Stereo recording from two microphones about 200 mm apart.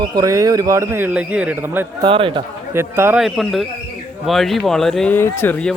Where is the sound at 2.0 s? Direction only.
25° right (ahead or behind).